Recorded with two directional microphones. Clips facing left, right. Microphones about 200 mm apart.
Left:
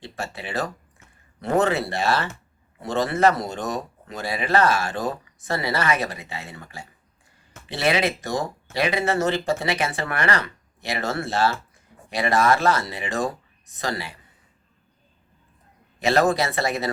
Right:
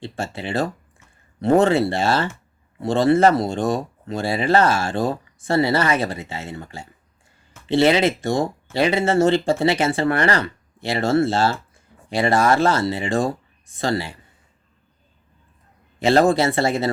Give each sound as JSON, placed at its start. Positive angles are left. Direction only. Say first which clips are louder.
{"t": 0.0, "sound": "speech", "louder": "right 5 dB", "side_deg": -25}
{"t": 16.0, "sound": "speech", "louder": "right 4 dB", "side_deg": -30}